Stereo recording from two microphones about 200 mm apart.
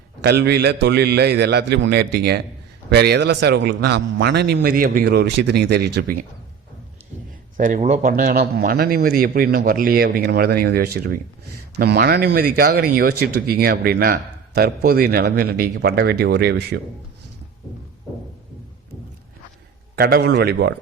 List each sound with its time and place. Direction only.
0.2 s a man's voice: 55° right (ahead or behind)
7.5 s speech: 40° right (ahead or behind)
20.0 s speech: 50° right (ahead or behind)